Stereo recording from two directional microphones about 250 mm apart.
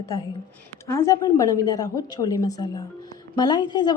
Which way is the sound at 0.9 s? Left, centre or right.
Centre.